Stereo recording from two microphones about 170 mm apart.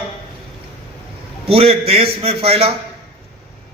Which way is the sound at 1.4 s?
35° right (ahead or behind).